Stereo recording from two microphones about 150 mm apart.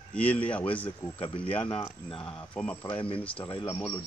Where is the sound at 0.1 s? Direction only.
10° left (ahead or behind).